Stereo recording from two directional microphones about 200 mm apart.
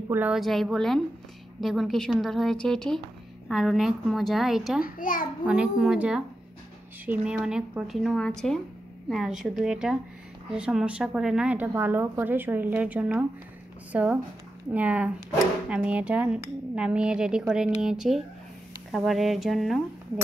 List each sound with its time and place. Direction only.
0.1 s speech: 5° right (ahead or behind)
4.8 s a child's voice: 45° left (ahead or behind)
5.5 s speech: 5° right (ahead or behind)